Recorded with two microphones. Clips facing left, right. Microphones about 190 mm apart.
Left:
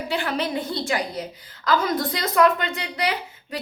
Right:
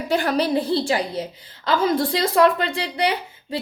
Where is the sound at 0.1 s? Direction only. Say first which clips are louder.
Right 6 dB; 40° right (ahead or behind).